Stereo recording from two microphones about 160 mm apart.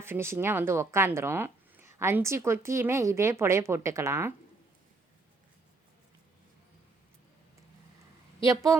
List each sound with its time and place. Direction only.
0.0 s speech: 15° right (ahead or behind)
8.4 s a woman's voice: 20° right (ahead or behind)